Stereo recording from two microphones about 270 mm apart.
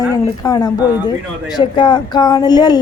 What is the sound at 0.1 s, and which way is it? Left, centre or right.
A woman's voice, centre.